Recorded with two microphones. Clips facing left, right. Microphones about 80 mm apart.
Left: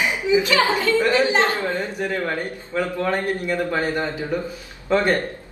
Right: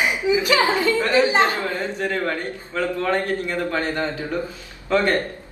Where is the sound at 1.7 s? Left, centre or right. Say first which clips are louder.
Even; centre.